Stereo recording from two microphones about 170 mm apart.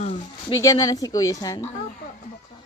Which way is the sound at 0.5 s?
20° left (ahead or behind).